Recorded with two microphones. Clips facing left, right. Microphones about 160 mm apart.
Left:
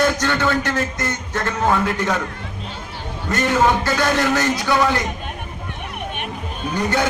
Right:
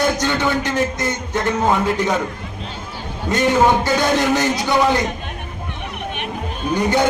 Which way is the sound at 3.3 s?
15° right (ahead or behind).